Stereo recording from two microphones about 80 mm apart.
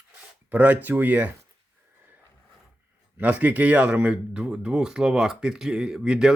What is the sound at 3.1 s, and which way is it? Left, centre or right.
Speech, centre.